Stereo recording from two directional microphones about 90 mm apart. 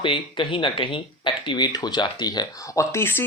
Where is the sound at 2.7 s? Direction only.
30° left (ahead or behind).